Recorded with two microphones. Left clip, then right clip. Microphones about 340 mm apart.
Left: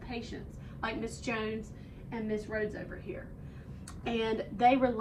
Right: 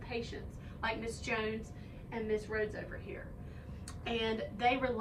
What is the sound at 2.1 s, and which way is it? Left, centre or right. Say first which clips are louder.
Speech: even; centre.